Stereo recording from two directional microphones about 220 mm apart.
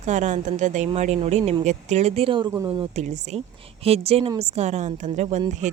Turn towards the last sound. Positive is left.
turn(degrees=-30)  # may be behind; listen again after turning